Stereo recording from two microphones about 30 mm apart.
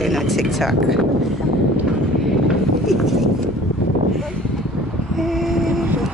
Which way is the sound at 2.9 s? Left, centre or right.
Centre.